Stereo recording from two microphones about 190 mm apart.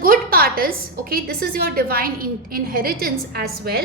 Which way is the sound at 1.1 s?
50° right (ahead or behind).